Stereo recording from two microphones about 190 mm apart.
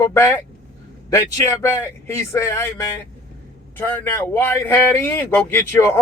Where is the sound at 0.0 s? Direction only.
15° left (ahead or behind).